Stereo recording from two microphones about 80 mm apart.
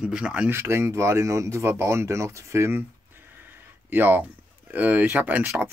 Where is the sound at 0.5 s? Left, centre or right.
Right.